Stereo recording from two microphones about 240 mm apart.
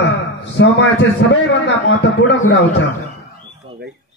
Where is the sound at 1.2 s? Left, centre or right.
Left.